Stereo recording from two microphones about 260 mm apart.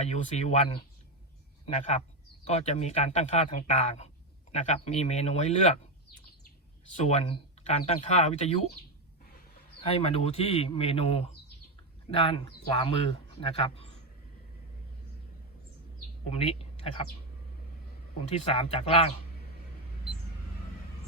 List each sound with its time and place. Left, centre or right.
0.0 s a man's voice: left
7.0 s speech: left
9.8 s speech: left
16.3 s speech: left
18.5 s speech: left